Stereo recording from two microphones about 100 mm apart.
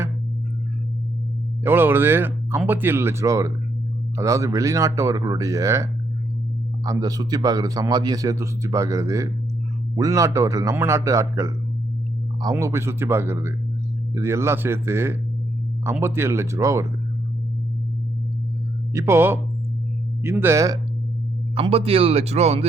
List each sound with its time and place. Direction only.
1.6 s a man's voice: 20° right (ahead or behind)
18.9 s speech: 25° right (ahead or behind)
21.5 s speech: 70° right (ahead or behind); by 22.6 s 90° right